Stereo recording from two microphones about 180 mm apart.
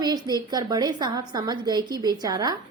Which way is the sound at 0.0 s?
20° right (ahead or behind).